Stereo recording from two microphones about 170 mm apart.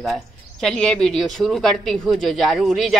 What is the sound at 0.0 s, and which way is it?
Speech, centre (ahead or behind).